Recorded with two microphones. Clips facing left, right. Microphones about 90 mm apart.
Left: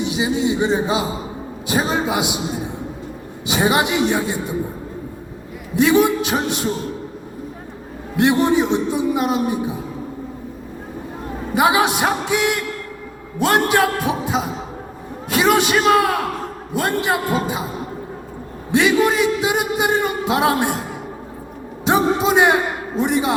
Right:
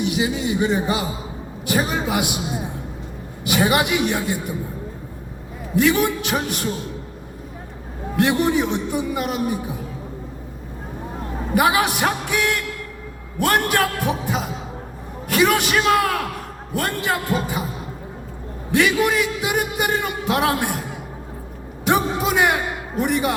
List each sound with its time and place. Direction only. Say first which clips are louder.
0.0 s a man's voice: left 2 dB; 20° left (ahead or behind)
3.4 s a man's voice: left 1 dB; 20° left (ahead or behind)
5.7 s a man's voice: left 3 dB; 20° left (ahead or behind)
8.1 s a man's voice: left 3 dB; 25° left (ahead or behind)
11.5 s a man's voice: left 2 dB; 20° left (ahead or behind)
18.7 s a man's voice: left 2 dB; 25° left (ahead or behind)
21.8 s a man's voice: left 3 dB; 20° left (ahead or behind)